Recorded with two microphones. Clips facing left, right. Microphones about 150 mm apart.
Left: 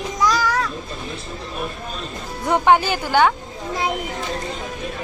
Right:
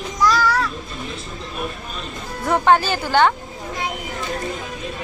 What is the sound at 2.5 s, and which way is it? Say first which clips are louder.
Speech: even; 15° left (ahead or behind).